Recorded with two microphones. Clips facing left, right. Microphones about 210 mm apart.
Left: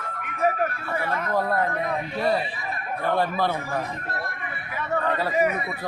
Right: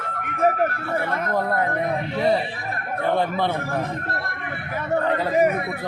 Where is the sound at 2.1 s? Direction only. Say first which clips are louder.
Right 3 dB; 20° right (ahead or behind).